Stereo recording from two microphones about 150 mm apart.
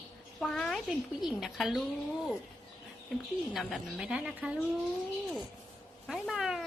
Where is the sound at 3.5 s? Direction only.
Centre (ahead or behind).